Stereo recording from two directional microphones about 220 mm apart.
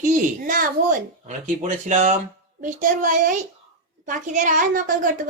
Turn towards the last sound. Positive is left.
turn(degrees=-35)  # may be behind; listen again after turning